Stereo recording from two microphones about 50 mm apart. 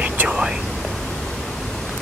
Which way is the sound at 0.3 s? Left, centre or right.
Centre.